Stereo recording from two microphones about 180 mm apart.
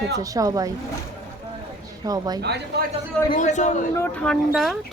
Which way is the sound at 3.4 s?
40° left (ahead or behind).